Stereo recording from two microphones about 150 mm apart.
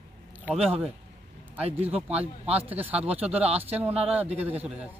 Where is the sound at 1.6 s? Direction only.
40° right (ahead or behind).